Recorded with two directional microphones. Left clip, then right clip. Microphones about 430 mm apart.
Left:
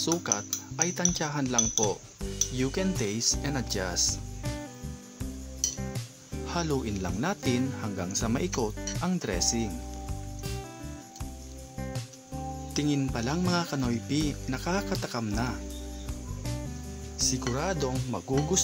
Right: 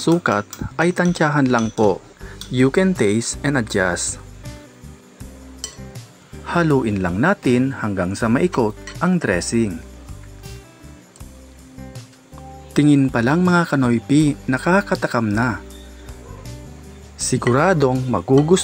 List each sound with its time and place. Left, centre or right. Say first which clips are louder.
0.0 s a man's voice: right 12 dB; left
6.4 s a man's voice: right 13 dB; left
12.7 s a man's voice: right 14 dB; left
17.3 s a man's voice: right 17 dB; left